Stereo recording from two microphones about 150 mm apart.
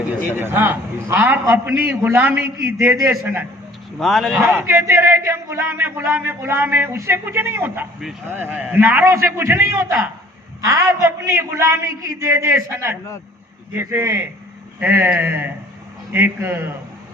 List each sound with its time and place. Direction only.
0.3 s a man's voice: 15° right (ahead or behind)
3.9 s speech: centre (ahead or behind)
4.7 s a man's voice: 15° right (ahead or behind)